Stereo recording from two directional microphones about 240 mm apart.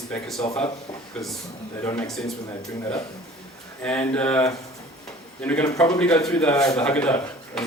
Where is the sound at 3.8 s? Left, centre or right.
Centre.